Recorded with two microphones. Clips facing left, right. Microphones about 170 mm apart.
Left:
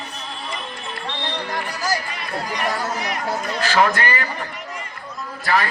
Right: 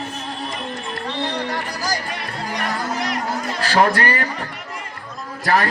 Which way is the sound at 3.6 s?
35° right (ahead or behind).